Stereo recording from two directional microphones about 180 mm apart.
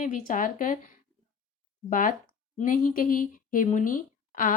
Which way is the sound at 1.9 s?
50° left (ahead or behind).